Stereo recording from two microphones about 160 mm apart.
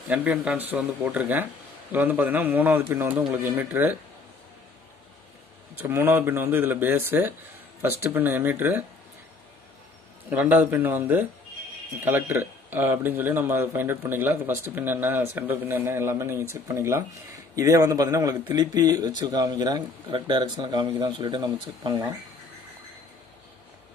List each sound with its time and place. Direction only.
0.1 s speech: 10° right (ahead or behind)
5.8 s speech: 15° right (ahead or behind)
10.3 s speech: 10° right (ahead or behind)